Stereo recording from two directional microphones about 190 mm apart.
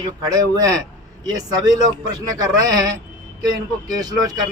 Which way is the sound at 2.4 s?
20° right (ahead or behind).